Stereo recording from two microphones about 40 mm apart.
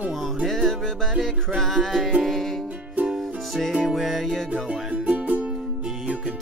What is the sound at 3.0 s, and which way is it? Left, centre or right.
Music, centre.